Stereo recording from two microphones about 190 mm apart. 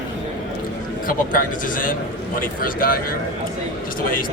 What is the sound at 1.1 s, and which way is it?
Speech, 45° left (ahead or behind).